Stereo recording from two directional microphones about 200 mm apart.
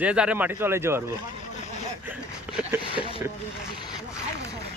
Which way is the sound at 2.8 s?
25° left (ahead or behind).